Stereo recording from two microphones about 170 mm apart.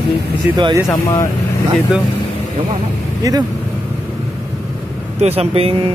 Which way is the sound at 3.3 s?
20° right (ahead or behind).